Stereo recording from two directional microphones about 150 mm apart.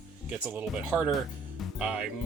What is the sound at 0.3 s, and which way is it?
Speech, 10° right (ahead or behind).